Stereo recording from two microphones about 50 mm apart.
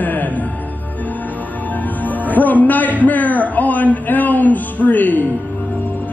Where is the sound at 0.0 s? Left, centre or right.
Left.